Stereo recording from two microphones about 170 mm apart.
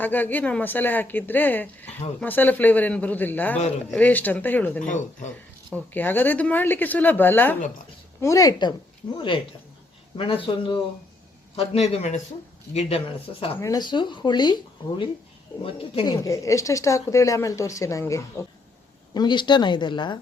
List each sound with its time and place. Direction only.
0.0 s speech: 10° left (ahead or behind)
4.9 s speech: 45° left (ahead or behind)
5.7 s a woman's voice: 10° left (ahead or behind); by 12.2 s 40° left (ahead or behind)
13.6 s a woman's voice: 20° left (ahead or behind)
16.2 s a woman's voice: 20° left (ahead or behind)